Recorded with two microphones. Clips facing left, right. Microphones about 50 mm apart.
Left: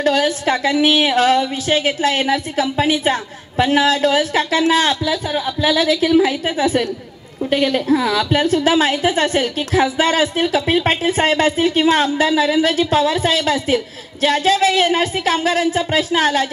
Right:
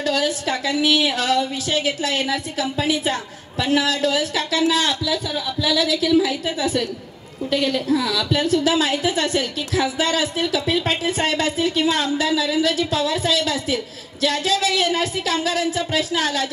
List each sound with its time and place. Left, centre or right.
0.0 s a woman's voice: left